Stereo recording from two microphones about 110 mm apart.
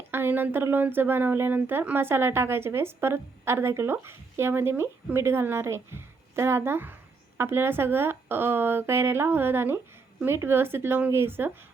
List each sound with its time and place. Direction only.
0.1 s speech: 20° right (ahead or behind)